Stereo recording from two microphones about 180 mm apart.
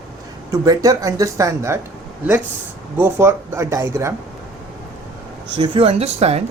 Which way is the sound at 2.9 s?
15° right (ahead or behind).